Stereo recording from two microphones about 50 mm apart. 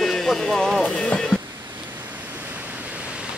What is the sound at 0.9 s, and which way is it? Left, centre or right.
Speech, centre.